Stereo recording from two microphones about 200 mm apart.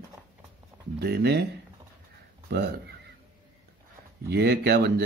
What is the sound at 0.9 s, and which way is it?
Speech, 55° right (ahead or behind).